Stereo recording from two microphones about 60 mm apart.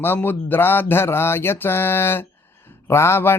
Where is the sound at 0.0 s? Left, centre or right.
Left.